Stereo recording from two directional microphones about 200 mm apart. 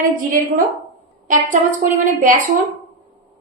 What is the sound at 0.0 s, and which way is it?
Speech, 45° right (ahead or behind).